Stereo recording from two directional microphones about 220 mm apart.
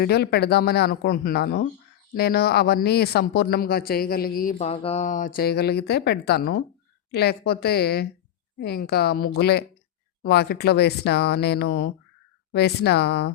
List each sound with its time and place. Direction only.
0.0 s speech: 45° left (ahead or behind)